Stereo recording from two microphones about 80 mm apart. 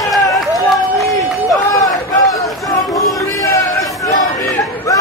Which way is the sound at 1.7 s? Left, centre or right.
Left.